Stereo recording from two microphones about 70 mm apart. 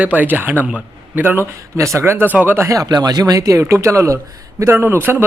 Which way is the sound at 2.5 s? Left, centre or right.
Right.